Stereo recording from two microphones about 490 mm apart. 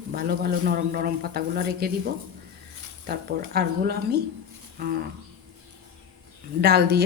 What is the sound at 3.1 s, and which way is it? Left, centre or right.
Speech, centre.